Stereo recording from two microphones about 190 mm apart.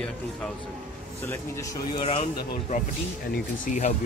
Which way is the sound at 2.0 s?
30° left (ahead or behind).